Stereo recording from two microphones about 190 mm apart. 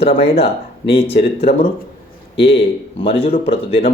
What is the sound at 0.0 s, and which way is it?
Speech, 30° left (ahead or behind).